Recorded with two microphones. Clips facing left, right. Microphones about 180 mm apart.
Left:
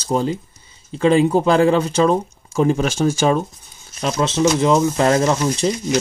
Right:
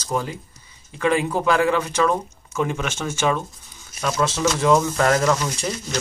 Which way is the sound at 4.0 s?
25° left (ahead or behind).